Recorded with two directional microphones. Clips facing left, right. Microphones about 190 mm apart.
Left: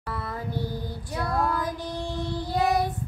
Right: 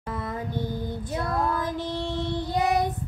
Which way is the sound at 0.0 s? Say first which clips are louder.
Right 2 dB; 20° right (ahead or behind).